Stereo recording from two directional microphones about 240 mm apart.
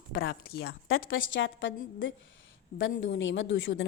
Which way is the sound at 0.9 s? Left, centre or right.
Left.